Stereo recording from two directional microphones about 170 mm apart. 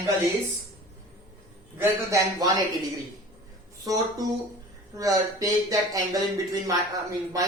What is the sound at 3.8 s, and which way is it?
Speech, 20° right (ahead or behind).